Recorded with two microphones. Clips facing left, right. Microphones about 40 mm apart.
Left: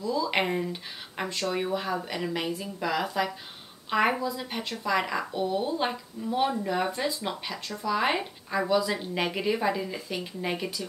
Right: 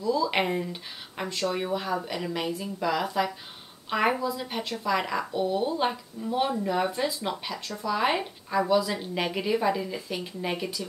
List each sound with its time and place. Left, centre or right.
0.0 s a woman's voice: centre